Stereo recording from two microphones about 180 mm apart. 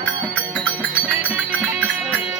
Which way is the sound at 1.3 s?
5° right (ahead or behind).